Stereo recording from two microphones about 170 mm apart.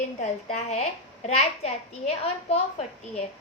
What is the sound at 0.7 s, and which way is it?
A woman's voice, 40° left (ahead or behind).